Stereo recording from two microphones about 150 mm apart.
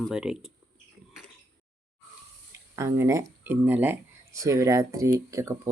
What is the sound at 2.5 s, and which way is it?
Speech, 20° right (ahead or behind).